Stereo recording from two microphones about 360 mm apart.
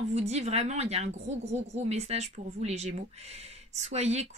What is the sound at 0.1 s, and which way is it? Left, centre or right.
A woman's voice, centre.